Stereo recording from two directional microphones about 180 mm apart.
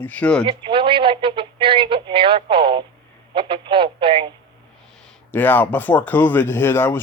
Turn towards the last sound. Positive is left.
turn(degrees=10)  # may be behind; listen again after turning